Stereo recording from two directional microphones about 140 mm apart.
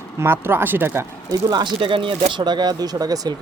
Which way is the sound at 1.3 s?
30° right (ahead or behind).